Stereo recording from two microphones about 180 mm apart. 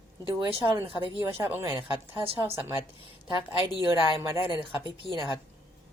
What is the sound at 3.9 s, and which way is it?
A woman's voice, 20° right (ahead or behind).